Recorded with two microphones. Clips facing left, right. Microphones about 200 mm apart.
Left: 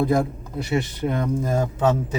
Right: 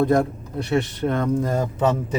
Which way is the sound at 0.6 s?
10° left (ahead or behind).